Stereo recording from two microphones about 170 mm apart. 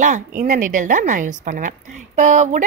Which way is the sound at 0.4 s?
50° right (ahead or behind).